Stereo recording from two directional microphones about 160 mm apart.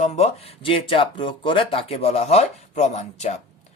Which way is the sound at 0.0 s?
40° left (ahead or behind).